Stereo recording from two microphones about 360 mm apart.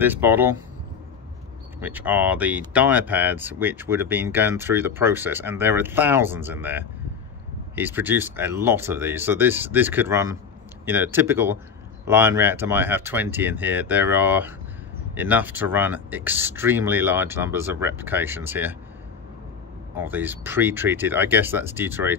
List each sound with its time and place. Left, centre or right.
0.0 s speech: centre
1.8 s speech: centre
20.0 s speech: centre